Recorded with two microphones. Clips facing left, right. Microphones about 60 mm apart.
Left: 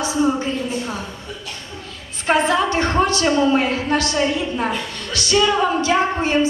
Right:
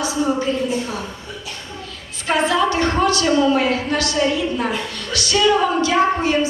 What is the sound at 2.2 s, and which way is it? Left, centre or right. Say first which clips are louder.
A woman's voice: even; left.